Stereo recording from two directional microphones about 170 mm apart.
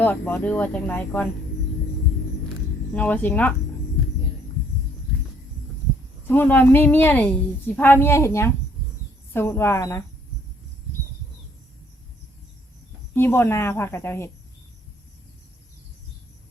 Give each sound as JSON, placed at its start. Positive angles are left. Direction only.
{"t": 0.0, "sound": "speech", "side_deg": 10}
{"t": 2.9, "sound": "speech", "side_deg": 10}
{"t": 6.2, "sound": "speech", "side_deg": 10}
{"t": 13.1, "sound": "speech", "side_deg": 15}